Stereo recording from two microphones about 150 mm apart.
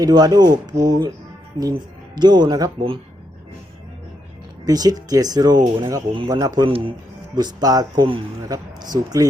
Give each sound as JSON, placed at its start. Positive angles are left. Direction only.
{"t": 0.0, "sound": "speech", "side_deg": -25}
{"t": 4.6, "sound": "speech", "side_deg": -25}
{"t": 6.7, "sound": "speech", "side_deg": -35}
{"t": 7.3, "sound": "speech", "side_deg": -25}